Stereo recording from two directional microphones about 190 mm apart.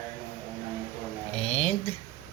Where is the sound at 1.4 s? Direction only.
35° left (ahead or behind).